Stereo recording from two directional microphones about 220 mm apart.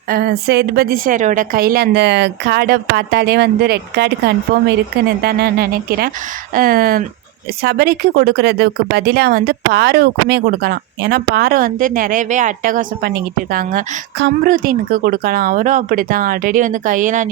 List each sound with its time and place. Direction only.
0.1 s speech: 45° right (ahead or behind)